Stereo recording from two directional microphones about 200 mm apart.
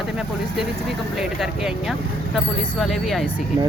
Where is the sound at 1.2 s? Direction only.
Centre (ahead or behind).